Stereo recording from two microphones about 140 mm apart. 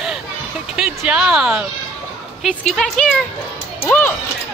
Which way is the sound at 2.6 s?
5° left (ahead or behind).